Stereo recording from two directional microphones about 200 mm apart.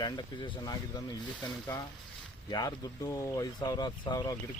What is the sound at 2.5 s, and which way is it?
Speech, 20° left (ahead or behind).